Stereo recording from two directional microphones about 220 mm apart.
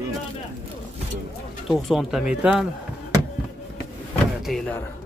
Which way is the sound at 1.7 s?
Centre (ahead or behind).